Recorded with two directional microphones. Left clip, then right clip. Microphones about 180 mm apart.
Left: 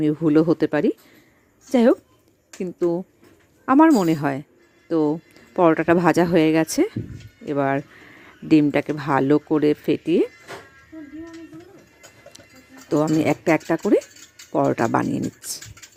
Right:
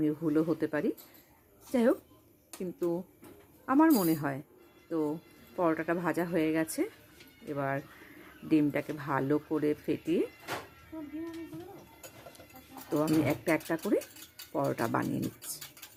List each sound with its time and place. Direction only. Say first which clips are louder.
0.0 s speech: left 11 dB; 35° left (ahead or behind)
12.9 s speech: left 9 dB; 40° left (ahead or behind)